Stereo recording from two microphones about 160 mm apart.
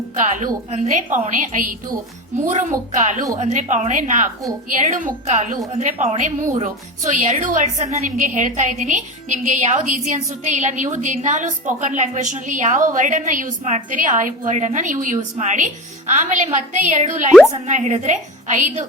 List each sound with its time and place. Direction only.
0.2 s a woman's voice: 50° right (ahead or behind)